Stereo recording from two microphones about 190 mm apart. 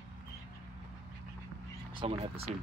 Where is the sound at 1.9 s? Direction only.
25° right (ahead or behind).